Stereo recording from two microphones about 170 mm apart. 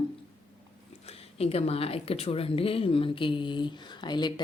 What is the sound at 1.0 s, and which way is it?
Speech, 35° left (ahead or behind).